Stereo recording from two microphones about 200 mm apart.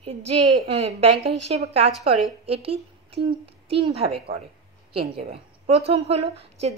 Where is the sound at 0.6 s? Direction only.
30° right (ahead or behind).